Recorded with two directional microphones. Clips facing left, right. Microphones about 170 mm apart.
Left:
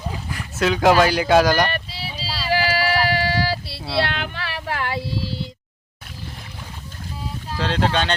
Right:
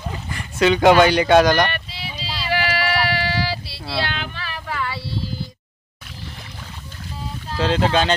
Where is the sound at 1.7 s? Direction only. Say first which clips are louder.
Left 2 dB; 35° left (ahead or behind); by 4.8 s 75° left (ahead or behind).